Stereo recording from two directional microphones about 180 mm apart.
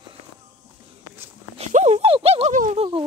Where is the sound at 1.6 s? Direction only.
40° right (ahead or behind).